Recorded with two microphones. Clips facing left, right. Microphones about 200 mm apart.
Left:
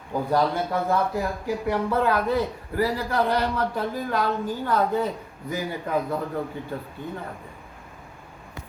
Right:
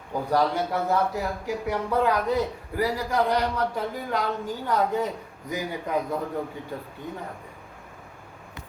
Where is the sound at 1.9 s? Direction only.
15° right (ahead or behind).